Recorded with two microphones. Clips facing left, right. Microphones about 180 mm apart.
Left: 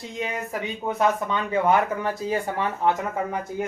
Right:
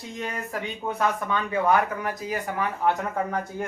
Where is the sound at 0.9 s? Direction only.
20° left (ahead or behind).